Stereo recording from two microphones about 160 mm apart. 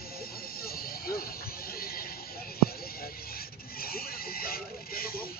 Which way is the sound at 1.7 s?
70° left (ahead or behind).